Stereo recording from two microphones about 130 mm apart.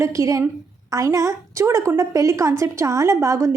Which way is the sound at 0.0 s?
25° right (ahead or behind).